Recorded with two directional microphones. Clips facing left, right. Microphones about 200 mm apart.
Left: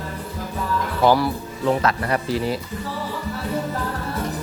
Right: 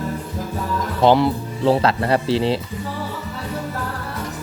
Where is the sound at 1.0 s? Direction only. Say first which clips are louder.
Right 3 dB; 20° right (ahead or behind).